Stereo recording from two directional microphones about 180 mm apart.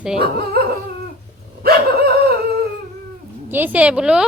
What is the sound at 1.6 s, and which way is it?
Dog, 60° right (ahead or behind).